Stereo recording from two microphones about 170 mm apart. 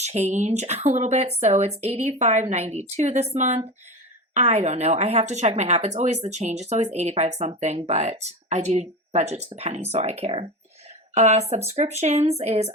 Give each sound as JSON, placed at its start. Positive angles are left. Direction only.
{"t": 0.0, "sound": "speech", "side_deg": -40}